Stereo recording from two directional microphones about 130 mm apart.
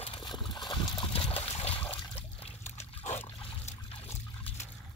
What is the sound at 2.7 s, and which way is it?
Dog, 55° left (ahead or behind).